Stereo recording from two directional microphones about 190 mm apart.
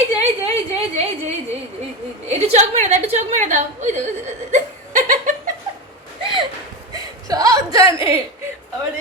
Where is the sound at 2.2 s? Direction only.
35° right (ahead or behind).